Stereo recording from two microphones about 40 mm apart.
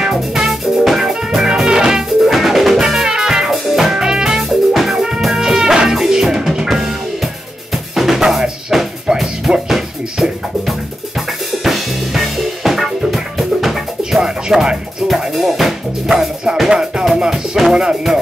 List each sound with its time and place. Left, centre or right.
0.0 s music: centre
4.4 s music: centre
5.4 s music: centre
7.9 s drum: centre
9.7 s music: centre
11.6 s music: centre
14.2 s music: centre
15.0 s speech: centre
16.5 s music: centre